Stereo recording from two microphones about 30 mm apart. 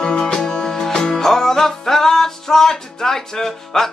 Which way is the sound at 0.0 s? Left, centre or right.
Left.